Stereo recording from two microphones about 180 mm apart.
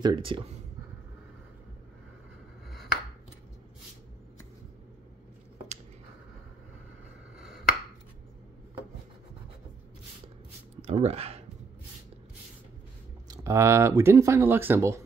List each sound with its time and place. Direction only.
0.0 s speech: 25° right (ahead or behind)
7.3 s finger snapping: centre (ahead or behind)
10.8 s speech: 35° right (ahead or behind)
13.3 s speech: 15° right (ahead or behind)